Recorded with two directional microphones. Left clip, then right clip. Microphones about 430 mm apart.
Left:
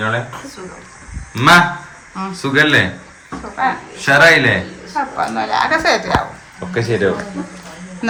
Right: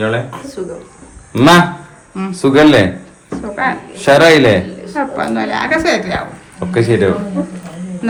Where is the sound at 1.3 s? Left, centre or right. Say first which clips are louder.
Right 1 dB; centre.